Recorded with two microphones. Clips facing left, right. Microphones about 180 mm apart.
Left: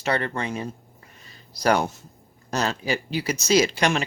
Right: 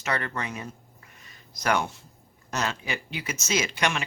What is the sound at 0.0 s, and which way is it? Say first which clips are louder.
Speech: left 5 dB; 30° left (ahead or behind).